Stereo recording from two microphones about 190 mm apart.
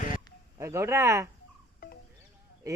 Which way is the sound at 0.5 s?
15° right (ahead or behind).